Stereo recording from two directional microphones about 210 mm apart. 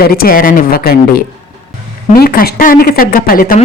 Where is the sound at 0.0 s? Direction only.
45° left (ahead or behind).